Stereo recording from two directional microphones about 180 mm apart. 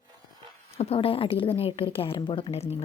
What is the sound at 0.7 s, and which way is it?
A woman's voice, 30° left (ahead or behind).